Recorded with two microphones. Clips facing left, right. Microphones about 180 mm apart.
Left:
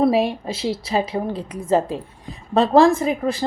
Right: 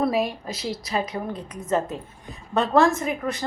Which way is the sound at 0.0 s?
30° left (ahead or behind).